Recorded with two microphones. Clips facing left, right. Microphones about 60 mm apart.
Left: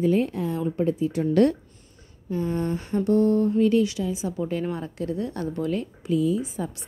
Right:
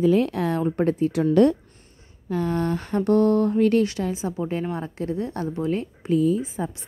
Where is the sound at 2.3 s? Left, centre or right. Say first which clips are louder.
Right 2 dB; right.